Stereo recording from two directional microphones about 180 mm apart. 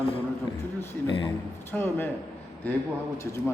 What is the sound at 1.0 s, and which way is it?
Speech, 30° left (ahead or behind).